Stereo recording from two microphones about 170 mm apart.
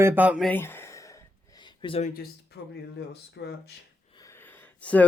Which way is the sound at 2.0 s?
60° left (ahead or behind).